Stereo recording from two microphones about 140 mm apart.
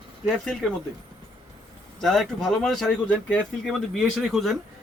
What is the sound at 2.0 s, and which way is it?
Speech, centre (ahead or behind).